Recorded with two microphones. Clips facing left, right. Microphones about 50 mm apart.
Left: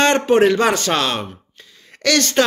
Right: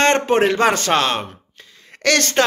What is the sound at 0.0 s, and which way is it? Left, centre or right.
Speech, right.